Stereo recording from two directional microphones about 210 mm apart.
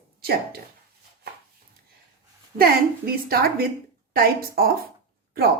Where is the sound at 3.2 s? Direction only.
45° right (ahead or behind).